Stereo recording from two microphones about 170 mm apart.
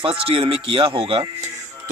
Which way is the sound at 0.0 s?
35° right (ahead or behind).